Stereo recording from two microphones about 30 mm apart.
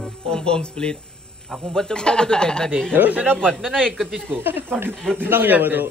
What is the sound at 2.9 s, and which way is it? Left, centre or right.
Speech, right.